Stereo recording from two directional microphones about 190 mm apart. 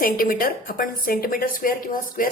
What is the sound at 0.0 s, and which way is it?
A woman's voice, 50° left (ahead or behind).